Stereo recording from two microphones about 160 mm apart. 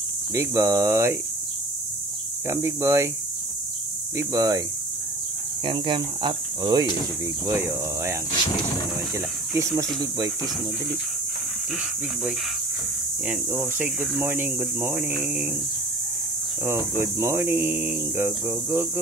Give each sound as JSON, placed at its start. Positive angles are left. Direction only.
{"t": 0.3, "sound": "speech", "side_deg": -20}
{"t": 2.4, "sound": "speech", "side_deg": -20}
{"t": 4.2, "sound": "speech", "side_deg": -20}
{"t": 5.7, "sound": "speech", "side_deg": -30}
{"t": 13.3, "sound": "speech", "side_deg": -10}
{"t": 16.6, "sound": "speech", "side_deg": -15}